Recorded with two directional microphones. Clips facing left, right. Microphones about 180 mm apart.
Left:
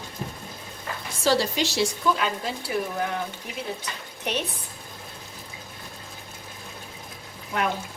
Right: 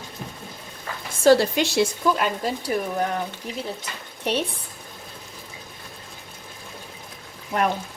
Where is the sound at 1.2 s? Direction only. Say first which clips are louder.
Right 6 dB; 55° right (ahead or behind).